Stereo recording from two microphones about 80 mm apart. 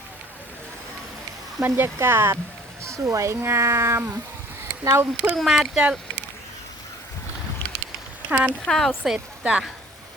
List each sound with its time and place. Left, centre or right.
1.6 s speech: right
5.4 s speech: centre
8.3 s speech: centre
8.6 s speech: centre
9.0 s speech: centre